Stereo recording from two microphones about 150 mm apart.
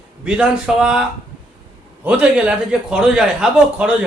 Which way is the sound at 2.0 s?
10° right (ahead or behind).